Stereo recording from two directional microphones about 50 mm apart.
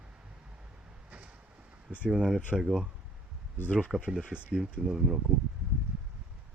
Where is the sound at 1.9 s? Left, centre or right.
Right.